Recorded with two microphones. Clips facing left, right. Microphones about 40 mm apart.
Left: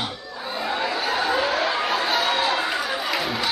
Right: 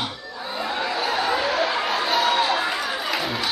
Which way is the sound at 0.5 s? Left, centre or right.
Centre.